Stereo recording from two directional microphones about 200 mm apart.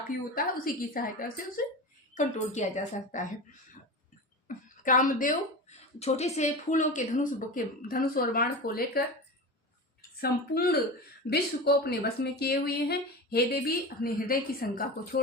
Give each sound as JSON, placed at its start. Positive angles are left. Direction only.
{"t": 0.3, "sound": "a woman's voice", "side_deg": 45}
{"t": 4.4, "sound": "a woman's voice", "side_deg": 40}
{"t": 10.2, "sound": "speech", "side_deg": 50}